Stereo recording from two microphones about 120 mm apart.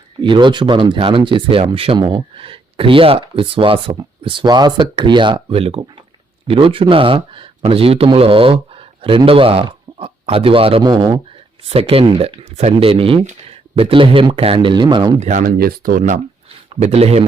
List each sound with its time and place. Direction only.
0.2 s a man's voice: 40° right (ahead or behind)
15.2 s speech: 90° right
16.8 s speech: 60° right (ahead or behind)